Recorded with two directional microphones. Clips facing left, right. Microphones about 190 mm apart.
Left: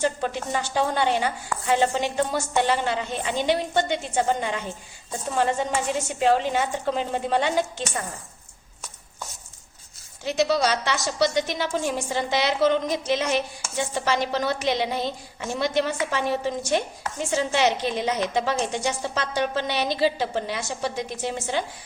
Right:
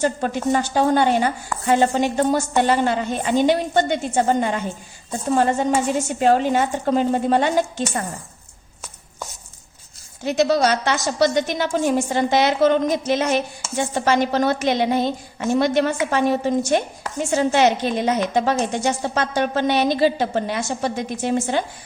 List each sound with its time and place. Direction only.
0.0 s a woman's voice: 45° right (ahead or behind)
10.2 s a woman's voice: 50° right (ahead or behind)